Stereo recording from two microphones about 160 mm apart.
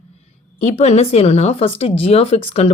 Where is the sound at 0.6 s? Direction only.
45° left (ahead or behind).